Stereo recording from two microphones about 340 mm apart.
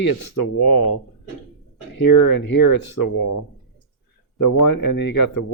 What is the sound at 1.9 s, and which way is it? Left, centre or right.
Speech, left.